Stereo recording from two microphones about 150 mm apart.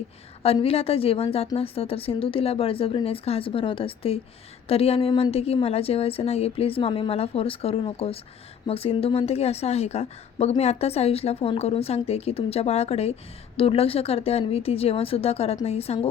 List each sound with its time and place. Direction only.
0.4 s a woman's voice: 40° left (ahead or behind)